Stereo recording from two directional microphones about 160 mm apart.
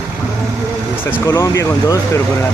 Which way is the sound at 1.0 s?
15° left (ahead or behind).